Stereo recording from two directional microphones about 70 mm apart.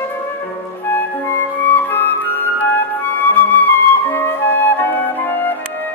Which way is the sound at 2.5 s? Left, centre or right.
Left.